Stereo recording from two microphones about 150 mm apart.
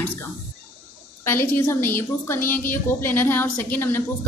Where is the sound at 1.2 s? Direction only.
15° left (ahead or behind).